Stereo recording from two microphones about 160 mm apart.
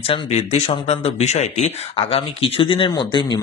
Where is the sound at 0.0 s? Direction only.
40° left (ahead or behind).